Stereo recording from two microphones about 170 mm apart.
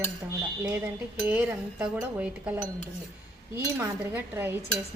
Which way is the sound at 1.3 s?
10° right (ahead or behind).